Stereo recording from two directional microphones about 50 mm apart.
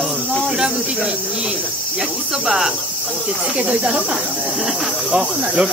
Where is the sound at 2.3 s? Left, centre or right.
Centre.